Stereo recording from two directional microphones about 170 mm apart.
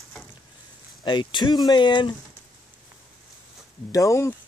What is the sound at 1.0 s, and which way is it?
Speech, 25° left (ahead or behind).